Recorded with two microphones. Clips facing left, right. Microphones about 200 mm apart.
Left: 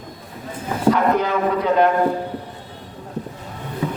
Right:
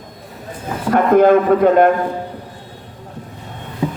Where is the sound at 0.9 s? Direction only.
50° right (ahead or behind).